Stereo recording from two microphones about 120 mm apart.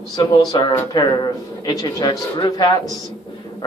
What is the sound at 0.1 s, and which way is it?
Speech, 35° left (ahead or behind).